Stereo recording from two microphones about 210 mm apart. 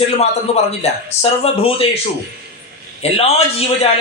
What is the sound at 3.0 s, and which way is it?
Speech, 30° left (ahead or behind).